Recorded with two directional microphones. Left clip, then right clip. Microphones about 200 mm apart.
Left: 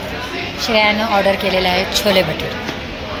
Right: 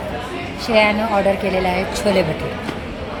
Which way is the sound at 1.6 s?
5° right (ahead or behind).